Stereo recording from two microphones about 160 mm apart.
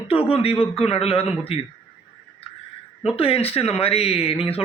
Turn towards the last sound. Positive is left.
turn(degrees=35)  # may be behind; listen again after turning